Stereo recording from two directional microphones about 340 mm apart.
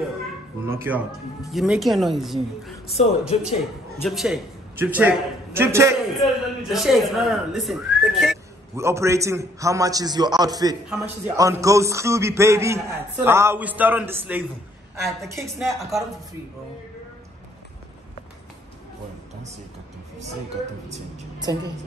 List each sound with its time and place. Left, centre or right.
0.7 s a woman's voice: centre
3.3 s a man's voice: centre
4.0 s a man's voice: centre